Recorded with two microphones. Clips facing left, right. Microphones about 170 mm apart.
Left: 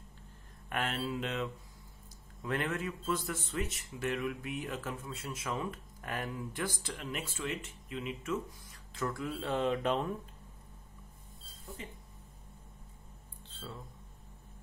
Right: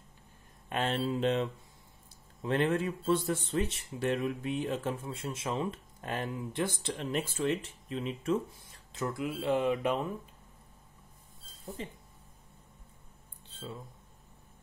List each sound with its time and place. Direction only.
0.7 s speech: 25° right (ahead or behind); by 10.0 s 10° right (ahead or behind)
11.6 s speech: 30° right (ahead or behind)
13.5 s a sound: 15° right (ahead or behind)